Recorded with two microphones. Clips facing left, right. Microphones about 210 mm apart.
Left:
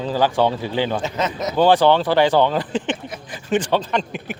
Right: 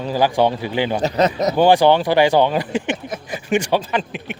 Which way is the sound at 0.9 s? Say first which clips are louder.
Right 6 dB; 40° right (ahead or behind).